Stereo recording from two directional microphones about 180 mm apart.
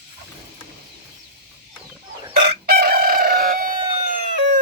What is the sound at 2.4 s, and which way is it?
Chicken, 60° right (ahead or behind).